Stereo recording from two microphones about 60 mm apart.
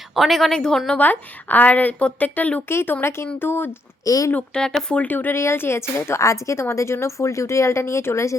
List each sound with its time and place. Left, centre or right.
0.2 s a woman's voice: centre
0.9 s a woman's voice: left
4.0 s speech: left
4.5 s speech: centre
4.9 s speech: left
5.4 s a woman's voice: left